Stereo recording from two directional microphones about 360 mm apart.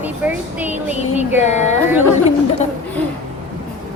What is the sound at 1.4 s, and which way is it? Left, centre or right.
Speech, centre.